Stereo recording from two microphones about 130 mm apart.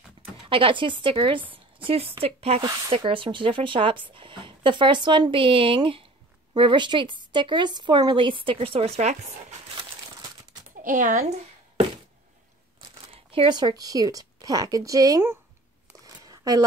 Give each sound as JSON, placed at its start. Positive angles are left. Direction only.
{"t": 0.5, "sound": "a woman's voice", "side_deg": -40}
{"t": 10.8, "sound": "speech", "side_deg": -80}
{"t": 13.1, "sound": "speech", "side_deg": -45}
{"t": 16.3, "sound": "a sound", "side_deg": -30}